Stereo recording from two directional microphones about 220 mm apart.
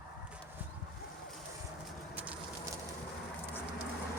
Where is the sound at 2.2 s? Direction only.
5° right (ahead or behind).